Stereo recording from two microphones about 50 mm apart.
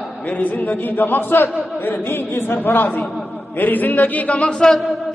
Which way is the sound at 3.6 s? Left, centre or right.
Left.